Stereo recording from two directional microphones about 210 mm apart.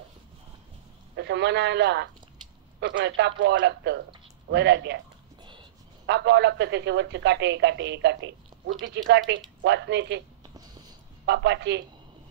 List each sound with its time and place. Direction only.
1.1 s speech: 55° right (ahead or behind)
5.4 s a sound: 25° right (ahead or behind)
6.0 s speech: 55° right (ahead or behind)
11.2 s speech: 55° right (ahead or behind)